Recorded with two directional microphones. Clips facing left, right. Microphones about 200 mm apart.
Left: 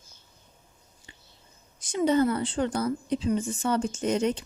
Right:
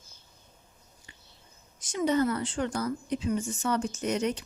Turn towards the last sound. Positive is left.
turn(degrees=25)  # may be behind; listen again after turning